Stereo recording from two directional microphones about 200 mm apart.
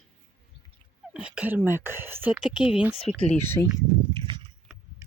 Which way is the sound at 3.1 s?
30° left (ahead or behind).